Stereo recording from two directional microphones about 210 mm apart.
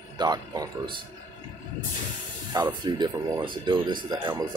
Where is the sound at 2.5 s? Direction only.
20° right (ahead or behind).